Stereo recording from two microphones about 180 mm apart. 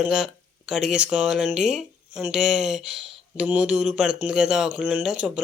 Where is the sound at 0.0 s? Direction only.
5° right (ahead or behind).